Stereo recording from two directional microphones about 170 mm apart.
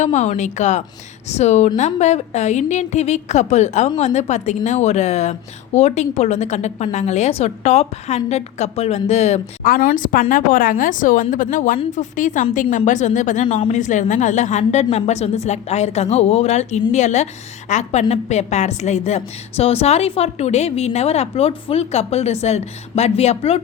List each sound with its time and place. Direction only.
0.0 s a woman's voice: 45° left (ahead or behind)
9.8 s a woman's voice: 50° left (ahead or behind)